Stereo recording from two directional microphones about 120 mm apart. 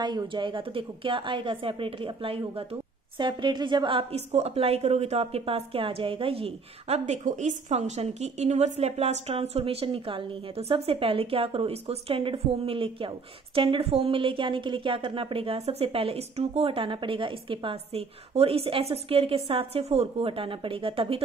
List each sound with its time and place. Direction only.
0.0 s a woman's voice: 40° right (ahead or behind)
4.1 s a woman's voice: 65° right (ahead or behind)